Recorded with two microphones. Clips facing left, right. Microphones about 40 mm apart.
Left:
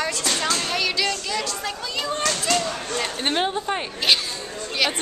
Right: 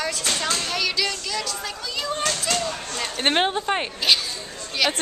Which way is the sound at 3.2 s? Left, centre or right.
Right.